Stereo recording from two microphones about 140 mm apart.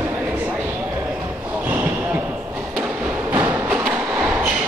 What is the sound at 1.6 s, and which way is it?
Basketball bounce, 10° right (ahead or behind).